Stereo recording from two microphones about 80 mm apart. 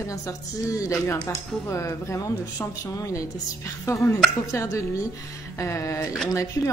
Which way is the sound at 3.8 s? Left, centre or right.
Left.